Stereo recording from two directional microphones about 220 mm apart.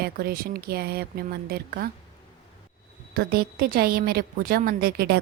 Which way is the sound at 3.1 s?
40° right (ahead or behind).